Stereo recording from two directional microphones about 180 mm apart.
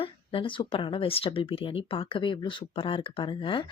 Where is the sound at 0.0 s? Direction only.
30° left (ahead or behind).